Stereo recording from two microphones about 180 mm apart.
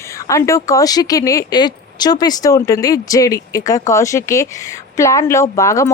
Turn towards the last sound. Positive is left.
turn(degrees=15)  # may be behind; listen again after turning